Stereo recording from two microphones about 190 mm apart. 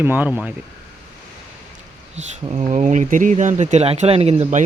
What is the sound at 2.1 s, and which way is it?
Speech, 35° right (ahead or behind).